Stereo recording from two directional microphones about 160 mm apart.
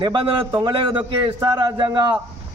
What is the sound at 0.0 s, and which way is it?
A man's voice, 30° right (ahead or behind).